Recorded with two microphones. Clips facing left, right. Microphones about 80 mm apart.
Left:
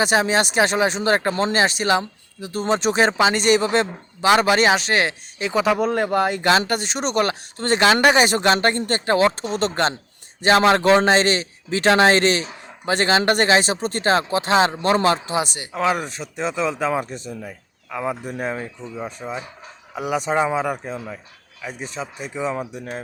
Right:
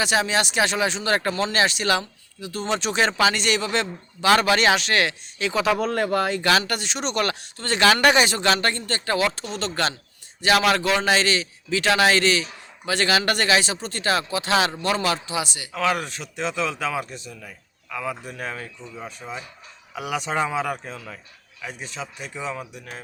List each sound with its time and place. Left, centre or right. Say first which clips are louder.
0.0 s speech: left 4 dB; left
5.6 s a man's voice: left 2 dB; centre; by 15.8 s left
15.8 s speech: left 2 dB; centre
20.1 s speech: left 4 dB; centre
21.6 s speech: left 4 dB; centre
22.7 s a man's voice: left 7 dB; left